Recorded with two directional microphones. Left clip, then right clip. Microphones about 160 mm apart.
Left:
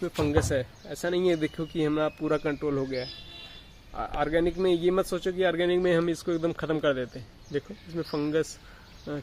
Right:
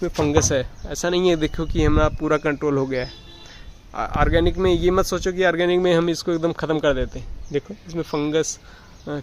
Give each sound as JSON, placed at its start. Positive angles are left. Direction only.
{"t": 0.0, "sound": "speech", "side_deg": -15}
{"t": 4.1, "sound": "speech", "side_deg": -15}